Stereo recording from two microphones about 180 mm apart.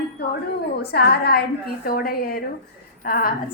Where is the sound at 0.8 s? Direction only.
65° left (ahead or behind).